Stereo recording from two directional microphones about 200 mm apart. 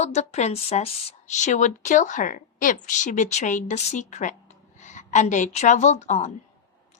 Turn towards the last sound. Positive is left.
turn(degrees=35)  # may be behind; listen again after turning